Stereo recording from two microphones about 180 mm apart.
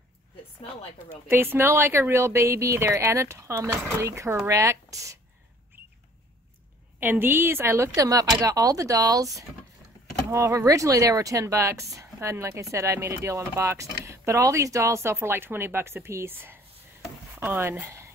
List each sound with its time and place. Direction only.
1.3 s speech: 10° right (ahead or behind)
5.8 s rodents: 10° right (ahead or behind)
7.0 s speech: 10° right (ahead or behind)